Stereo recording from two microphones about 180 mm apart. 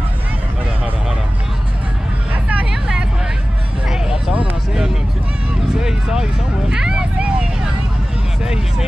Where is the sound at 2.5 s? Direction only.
5° right (ahead or behind).